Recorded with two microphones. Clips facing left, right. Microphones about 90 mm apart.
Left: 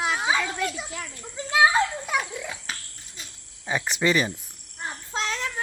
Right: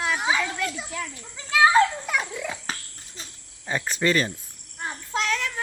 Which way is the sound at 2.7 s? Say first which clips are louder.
Right 2 dB; 40° right (ahead or behind).